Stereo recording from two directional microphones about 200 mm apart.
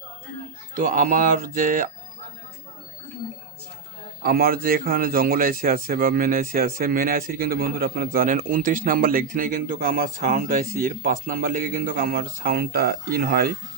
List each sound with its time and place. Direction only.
0.7 s speech: 45° right (ahead or behind)
4.2 s speech: 50° right (ahead or behind)